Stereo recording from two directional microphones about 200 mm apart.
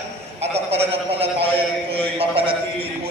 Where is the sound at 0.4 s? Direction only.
30° right (ahead or behind).